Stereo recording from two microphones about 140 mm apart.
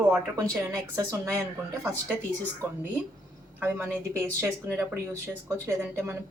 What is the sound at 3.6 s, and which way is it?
Speech, 15° right (ahead or behind).